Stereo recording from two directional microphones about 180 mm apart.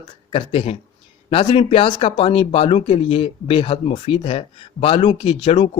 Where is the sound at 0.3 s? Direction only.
30° left (ahead or behind).